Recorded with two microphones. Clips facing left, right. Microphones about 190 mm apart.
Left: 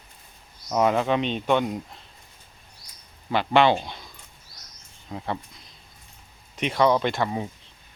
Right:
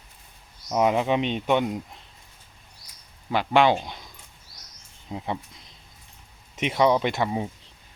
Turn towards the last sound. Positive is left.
turn(degrees=-20)  # may be behind; listen again after turning